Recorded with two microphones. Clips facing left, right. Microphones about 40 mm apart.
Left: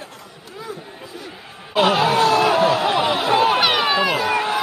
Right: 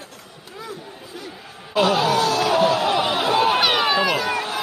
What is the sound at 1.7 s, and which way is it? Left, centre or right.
Chatter, left.